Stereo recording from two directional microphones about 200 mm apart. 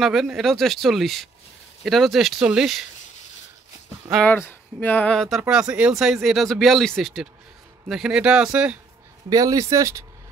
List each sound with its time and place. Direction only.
0.0 s speech: centre (ahead or behind)
4.1 s speech: 5° left (ahead or behind)
9.3 s speech: 15° right (ahead or behind)